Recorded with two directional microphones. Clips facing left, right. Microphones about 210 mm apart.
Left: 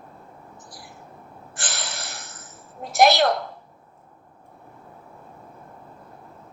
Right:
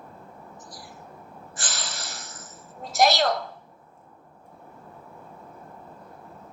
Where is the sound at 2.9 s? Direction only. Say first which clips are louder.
Left 4 dB; 60° left (ahead or behind).